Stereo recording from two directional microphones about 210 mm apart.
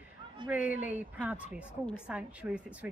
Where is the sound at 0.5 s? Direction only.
5° right (ahead or behind).